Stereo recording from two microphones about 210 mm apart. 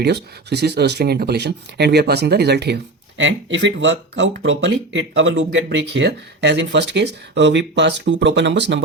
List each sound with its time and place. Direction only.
0.0 s speech: 50° right (ahead or behind)